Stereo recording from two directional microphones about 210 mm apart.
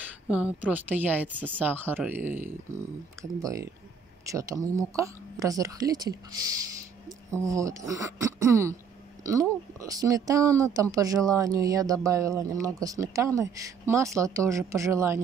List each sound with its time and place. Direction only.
0.3 s speech: 5° right (ahead or behind)